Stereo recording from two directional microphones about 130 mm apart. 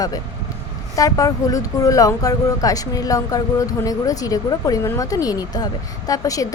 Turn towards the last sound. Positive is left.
turn(degrees=25)  # may be behind; listen again after turning